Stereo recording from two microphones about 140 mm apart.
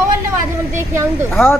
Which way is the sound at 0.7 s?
20° right (ahead or behind).